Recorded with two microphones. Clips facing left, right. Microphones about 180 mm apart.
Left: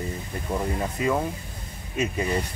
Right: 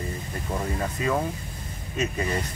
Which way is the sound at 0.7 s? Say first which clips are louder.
Even; 10° left (ahead or behind).